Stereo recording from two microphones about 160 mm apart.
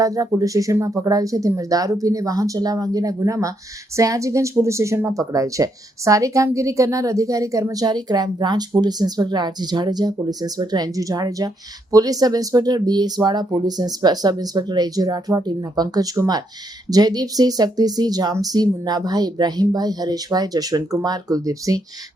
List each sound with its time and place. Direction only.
0.0 s speech: 20° right (ahead or behind)